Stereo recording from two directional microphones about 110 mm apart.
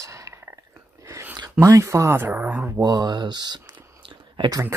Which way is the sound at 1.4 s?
30° right (ahead or behind).